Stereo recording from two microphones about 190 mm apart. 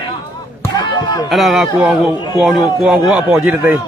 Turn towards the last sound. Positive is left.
turn(degrees=-10)  # may be behind; listen again after turning